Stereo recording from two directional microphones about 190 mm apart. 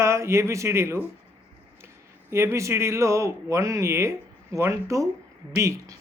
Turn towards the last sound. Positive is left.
turn(degrees=-15)  # may be behind; listen again after turning